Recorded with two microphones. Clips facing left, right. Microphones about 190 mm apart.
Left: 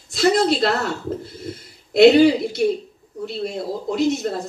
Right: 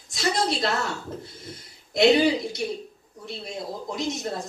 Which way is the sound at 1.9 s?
60° left (ahead or behind).